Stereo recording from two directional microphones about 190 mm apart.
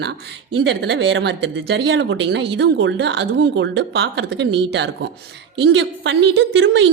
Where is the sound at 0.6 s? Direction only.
65° right (ahead or behind).